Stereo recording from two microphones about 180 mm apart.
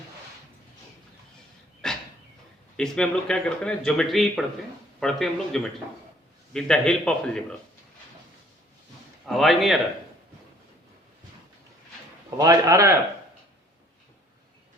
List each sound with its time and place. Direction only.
1.8 s a sound: 5° left (ahead or behind)
2.7 s speech: 5° left (ahead or behind)
9.2 s speech: centre (ahead or behind)
12.4 s a man's voice: 20° right (ahead or behind)